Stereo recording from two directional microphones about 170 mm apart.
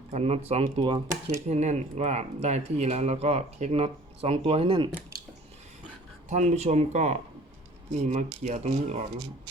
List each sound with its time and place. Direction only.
0.1 s speech: 40° right (ahead or behind)
0.9 s speech: 20° right (ahead or behind)
1.5 s speech: 40° right (ahead or behind)
6.2 s speech: 45° right (ahead or behind)